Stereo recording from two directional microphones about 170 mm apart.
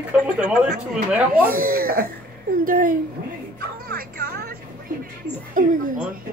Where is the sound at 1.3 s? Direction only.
60° right (ahead or behind).